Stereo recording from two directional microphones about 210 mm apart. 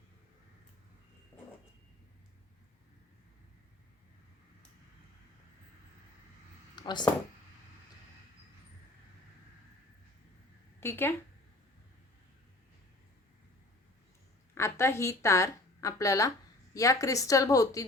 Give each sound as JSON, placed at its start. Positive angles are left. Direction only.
{"t": 6.7, "sound": "a sound", "side_deg": 20}
{"t": 10.8, "sound": "speech", "side_deg": 10}
{"t": 14.5, "sound": "a woman's voice", "side_deg": 10}